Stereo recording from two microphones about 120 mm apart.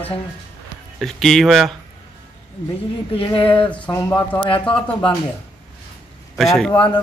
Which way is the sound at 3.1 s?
45° left (ahead or behind).